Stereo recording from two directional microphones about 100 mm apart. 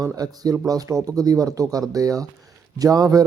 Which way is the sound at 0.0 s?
35° right (ahead or behind).